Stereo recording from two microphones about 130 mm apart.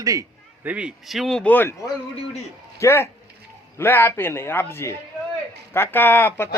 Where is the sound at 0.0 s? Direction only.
25° right (ahead or behind).